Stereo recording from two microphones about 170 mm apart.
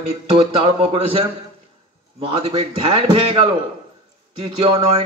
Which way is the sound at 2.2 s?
35° right (ahead or behind).